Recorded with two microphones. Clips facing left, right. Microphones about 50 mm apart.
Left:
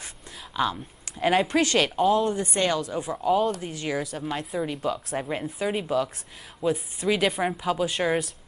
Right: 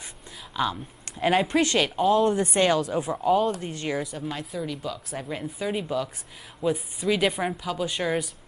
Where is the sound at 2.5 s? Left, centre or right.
Centre.